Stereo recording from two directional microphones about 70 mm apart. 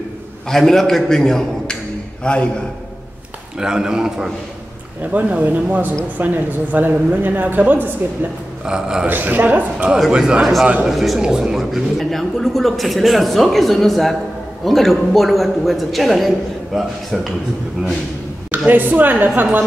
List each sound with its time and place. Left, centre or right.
0.5 s a woman's voice: centre
2.2 s a man's voice: centre
3.5 s a man's voice: centre
5.1 s speech: right
8.6 s a man's voice: centre
9.0 s a man's voice: right
10.9 s a woman's voice: centre
18.7 s speech: right